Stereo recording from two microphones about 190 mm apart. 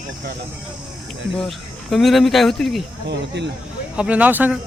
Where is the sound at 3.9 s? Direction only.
5° right (ahead or behind).